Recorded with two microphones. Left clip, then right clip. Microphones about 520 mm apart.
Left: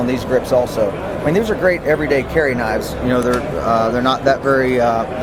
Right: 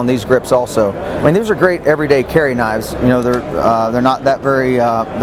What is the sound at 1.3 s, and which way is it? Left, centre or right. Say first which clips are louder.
Speech: right 2 dB; right.